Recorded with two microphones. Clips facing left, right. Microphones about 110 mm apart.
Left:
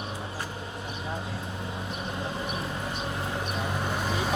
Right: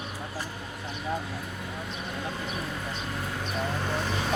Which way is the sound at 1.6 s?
20° left (ahead or behind).